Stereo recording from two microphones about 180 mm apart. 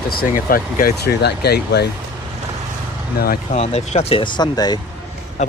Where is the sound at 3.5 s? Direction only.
35° left (ahead or behind).